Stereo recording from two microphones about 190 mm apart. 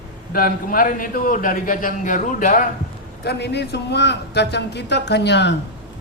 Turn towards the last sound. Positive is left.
turn(degrees=65)  # may be behind; listen again after turning